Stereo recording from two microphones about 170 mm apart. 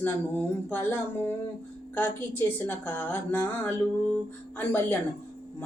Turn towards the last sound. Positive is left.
turn(degrees=10)  # may be behind; listen again after turning